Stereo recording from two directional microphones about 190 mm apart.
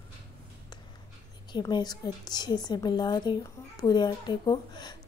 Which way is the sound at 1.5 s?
20° left (ahead or behind).